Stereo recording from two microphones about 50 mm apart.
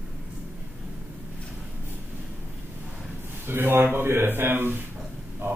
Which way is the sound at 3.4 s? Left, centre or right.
Right.